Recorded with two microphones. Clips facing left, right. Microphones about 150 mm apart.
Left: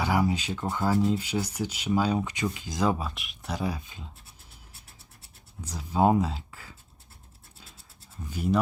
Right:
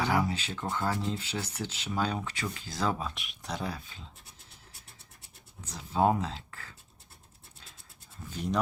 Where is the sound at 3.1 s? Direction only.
Centre (ahead or behind).